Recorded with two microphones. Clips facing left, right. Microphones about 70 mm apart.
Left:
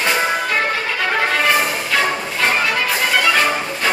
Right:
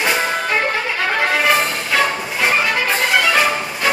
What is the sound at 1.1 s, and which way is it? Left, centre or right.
Music, centre.